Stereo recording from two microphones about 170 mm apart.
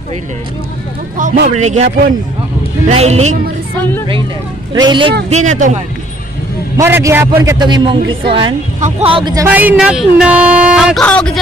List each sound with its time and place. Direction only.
1.1 s speech: 50° right (ahead or behind)
2.9 s speech: 40° right (ahead or behind)
4.7 s speech: 25° right (ahead or behind)
5.3 s speech: 45° right (ahead or behind)
6.8 s speech: 15° right (ahead or behind)
7.5 s speech: 25° right (ahead or behind)
9.5 s speech: 10° right (ahead or behind)
11.0 s speech: 5° left (ahead or behind)